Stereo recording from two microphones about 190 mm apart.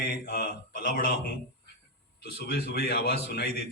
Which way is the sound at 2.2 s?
55° left (ahead or behind).